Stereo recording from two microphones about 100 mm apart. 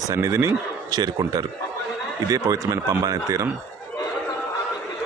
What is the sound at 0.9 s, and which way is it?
A man's voice, 40° right (ahead or behind).